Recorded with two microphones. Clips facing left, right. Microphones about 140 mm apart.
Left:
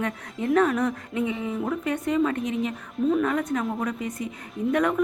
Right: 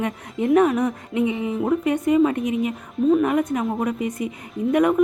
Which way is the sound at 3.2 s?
15° right (ahead or behind).